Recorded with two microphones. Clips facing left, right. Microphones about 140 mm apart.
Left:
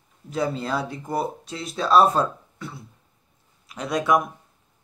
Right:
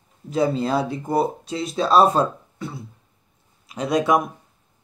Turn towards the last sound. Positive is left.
turn(degrees=-20)  # may be behind; listen again after turning